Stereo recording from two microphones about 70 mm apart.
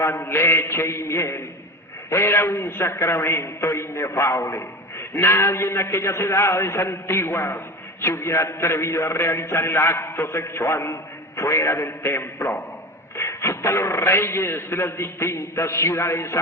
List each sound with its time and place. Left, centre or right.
0.0 s a man's voice: left
13.1 s a man's voice: left